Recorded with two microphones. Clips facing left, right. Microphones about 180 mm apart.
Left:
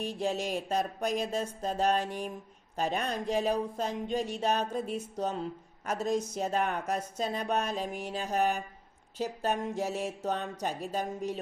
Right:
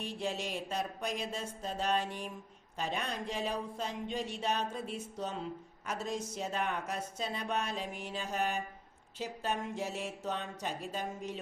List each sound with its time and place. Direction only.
0.0 s speech: 40° left (ahead or behind)